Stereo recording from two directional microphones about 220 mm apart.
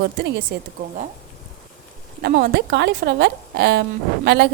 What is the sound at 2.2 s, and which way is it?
A woman's voice, 45° right (ahead or behind).